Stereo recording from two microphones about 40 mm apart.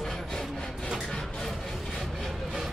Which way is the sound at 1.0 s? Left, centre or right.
Centre.